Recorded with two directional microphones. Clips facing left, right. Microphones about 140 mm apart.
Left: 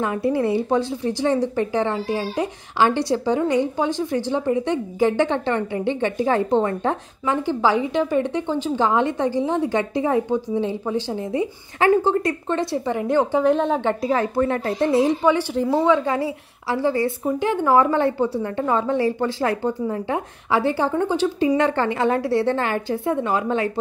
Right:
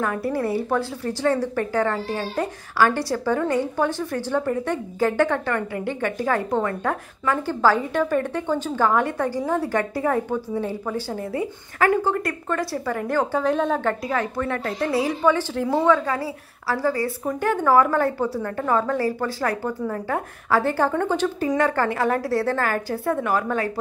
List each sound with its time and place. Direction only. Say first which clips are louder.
0.0 s a woman's voice: left 3 dB; 20° left (ahead or behind)
20.7 s a woman's voice: left 1 dB; 10° left (ahead or behind)